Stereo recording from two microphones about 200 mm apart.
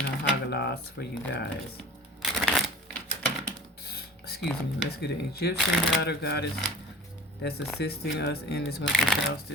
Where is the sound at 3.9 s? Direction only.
50° left (ahead or behind).